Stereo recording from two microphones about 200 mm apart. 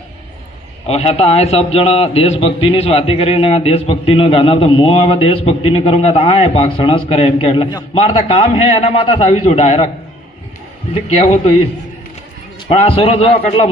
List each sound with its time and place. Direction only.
0.9 s a man's voice: 30° left (ahead or behind)
8.0 s a man's voice: 35° left (ahead or behind)
11.2 s a man's voice: 35° left (ahead or behind)
12.6 s a man's voice: 30° left (ahead or behind)